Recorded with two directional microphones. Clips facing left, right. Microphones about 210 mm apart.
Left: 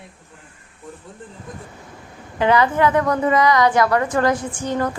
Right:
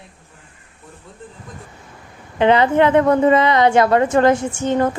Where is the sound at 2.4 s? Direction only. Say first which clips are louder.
Right 3 dB; 25° right (ahead or behind).